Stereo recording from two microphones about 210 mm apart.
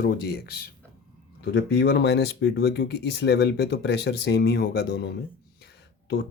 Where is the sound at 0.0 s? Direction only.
50° left (ahead or behind).